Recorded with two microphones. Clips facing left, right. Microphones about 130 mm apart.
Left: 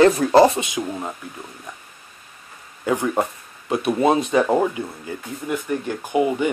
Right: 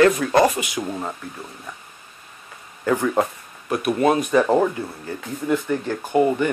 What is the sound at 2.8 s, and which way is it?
Speech, 15° left (ahead or behind).